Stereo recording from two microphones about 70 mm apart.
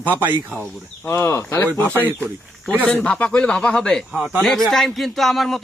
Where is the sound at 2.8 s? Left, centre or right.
Centre.